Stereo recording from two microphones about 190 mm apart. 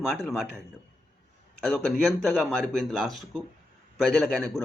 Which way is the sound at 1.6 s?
Centre (ahead or behind).